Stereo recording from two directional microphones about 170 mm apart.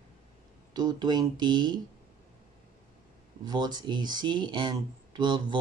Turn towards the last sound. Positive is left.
turn(degrees=-25)  # may be behind; listen again after turning